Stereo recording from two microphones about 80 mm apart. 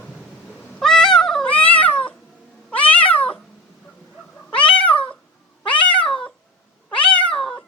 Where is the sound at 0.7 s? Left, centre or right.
Centre.